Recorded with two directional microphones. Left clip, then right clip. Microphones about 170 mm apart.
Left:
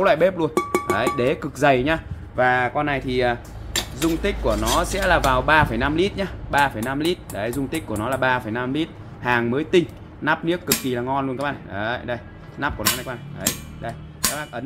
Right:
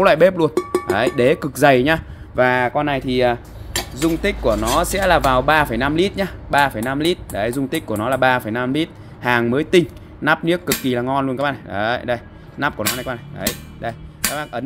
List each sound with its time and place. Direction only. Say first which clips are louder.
0.0 s speech: right 5 dB; 50° right (ahead or behind)
13.7 s music: right 4 dB; 50° right (ahead or behind)